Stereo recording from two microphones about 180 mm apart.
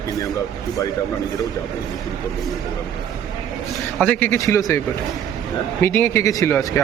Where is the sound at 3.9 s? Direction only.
5° left (ahead or behind).